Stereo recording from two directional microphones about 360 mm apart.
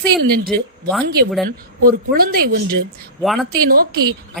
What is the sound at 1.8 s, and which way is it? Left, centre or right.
Speech, right.